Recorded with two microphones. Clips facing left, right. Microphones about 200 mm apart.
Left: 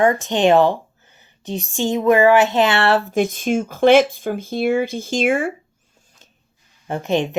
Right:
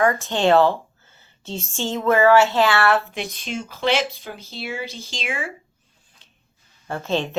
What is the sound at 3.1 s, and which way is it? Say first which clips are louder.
Speech: left 11 dB; 50° left (ahead or behind).